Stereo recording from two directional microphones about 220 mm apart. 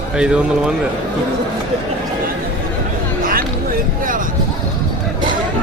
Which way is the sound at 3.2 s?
40° right (ahead or behind).